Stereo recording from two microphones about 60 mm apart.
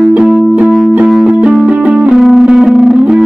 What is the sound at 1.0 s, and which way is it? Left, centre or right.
Music, centre.